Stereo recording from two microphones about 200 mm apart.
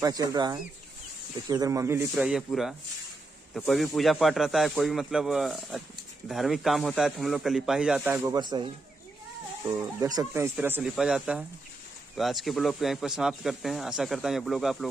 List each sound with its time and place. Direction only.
0.0 s speech: 20° right (ahead or behind)
8.4 s speech: 20° right (ahead or behind)
9.7 s speech: 20° right (ahead or behind); by 14.9 s centre (ahead or behind)